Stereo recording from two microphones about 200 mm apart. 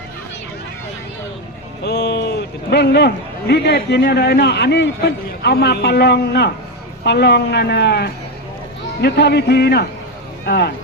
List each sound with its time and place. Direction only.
1.8 s a man's voice: 55° left (ahead or behind)